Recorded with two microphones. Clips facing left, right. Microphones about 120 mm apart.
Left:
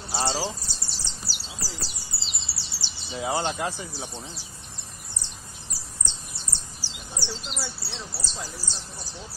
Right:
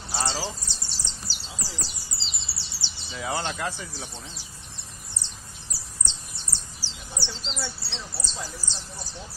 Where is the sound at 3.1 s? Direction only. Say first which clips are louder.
Left 3 dB; 20° left (ahead or behind).